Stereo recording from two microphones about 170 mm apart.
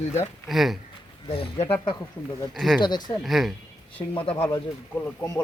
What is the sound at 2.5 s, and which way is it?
Speech, centre (ahead or behind).